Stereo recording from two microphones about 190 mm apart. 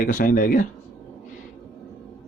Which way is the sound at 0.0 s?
45° left (ahead or behind).